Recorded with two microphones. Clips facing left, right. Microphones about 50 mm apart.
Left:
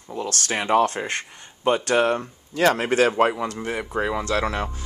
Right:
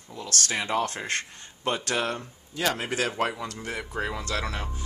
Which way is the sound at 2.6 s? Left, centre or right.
Left.